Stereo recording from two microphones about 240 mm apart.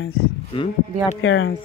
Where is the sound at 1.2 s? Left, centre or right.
Left.